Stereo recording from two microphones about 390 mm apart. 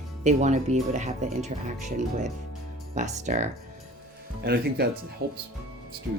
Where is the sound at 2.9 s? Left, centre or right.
Centre.